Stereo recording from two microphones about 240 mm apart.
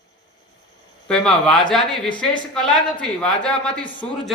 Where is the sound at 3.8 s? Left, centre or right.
Left.